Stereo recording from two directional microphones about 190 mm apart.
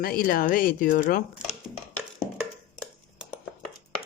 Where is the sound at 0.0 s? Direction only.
50° left (ahead or behind).